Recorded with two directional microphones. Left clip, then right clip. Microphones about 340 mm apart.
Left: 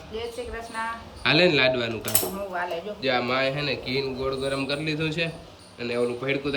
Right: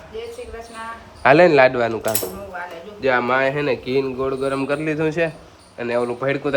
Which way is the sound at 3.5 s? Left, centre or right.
Centre.